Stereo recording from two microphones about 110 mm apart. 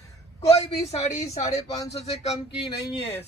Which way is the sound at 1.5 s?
75° left (ahead or behind).